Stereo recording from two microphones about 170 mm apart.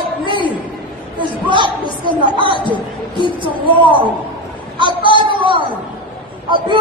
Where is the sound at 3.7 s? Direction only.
30° right (ahead or behind).